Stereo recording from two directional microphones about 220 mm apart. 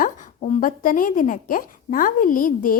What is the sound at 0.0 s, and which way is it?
A woman's voice, 40° left (ahead or behind).